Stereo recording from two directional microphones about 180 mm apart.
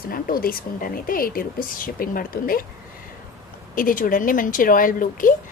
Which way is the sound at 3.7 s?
50° left (ahead or behind).